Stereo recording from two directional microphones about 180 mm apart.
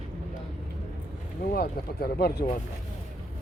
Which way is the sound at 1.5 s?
60° left (ahead or behind).